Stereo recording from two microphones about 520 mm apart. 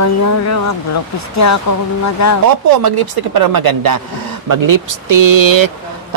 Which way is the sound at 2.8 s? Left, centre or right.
Right.